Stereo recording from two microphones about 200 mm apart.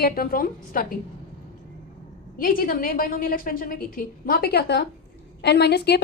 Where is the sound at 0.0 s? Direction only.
50° left (ahead or behind).